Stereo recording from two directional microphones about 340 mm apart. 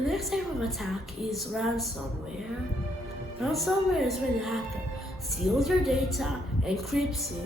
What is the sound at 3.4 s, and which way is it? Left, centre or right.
A woman's voice, centre.